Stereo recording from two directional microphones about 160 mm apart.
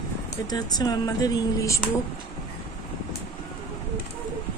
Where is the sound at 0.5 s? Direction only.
25° left (ahead or behind).